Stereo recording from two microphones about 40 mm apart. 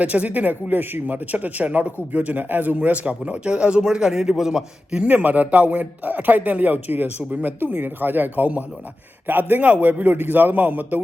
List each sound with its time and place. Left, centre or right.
0.0 s speech: right
2.7 s a man's voice: right; by 4.9 s centre
5.0 s a man's voice: right
9.6 s speech: right